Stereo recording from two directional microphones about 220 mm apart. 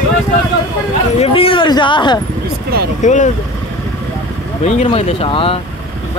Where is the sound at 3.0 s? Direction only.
35° left (ahead or behind).